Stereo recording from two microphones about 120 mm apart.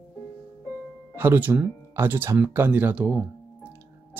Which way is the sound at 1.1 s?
15° right (ahead or behind).